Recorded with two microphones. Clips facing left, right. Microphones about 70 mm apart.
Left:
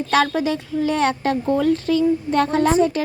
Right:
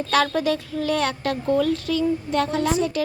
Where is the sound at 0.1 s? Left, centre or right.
Left.